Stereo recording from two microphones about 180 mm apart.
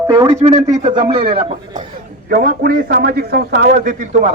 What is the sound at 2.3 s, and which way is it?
A man's voice, 50° right (ahead or behind).